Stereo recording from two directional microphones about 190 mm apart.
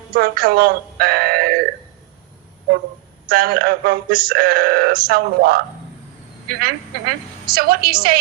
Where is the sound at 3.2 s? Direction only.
50° right (ahead or behind).